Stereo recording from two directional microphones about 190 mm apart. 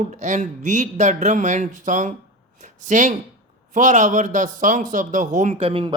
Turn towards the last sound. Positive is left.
turn(degrees=-30)  # may be behind; listen again after turning